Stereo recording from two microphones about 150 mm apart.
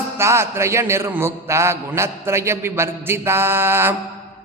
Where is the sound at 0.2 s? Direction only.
15° right (ahead or behind).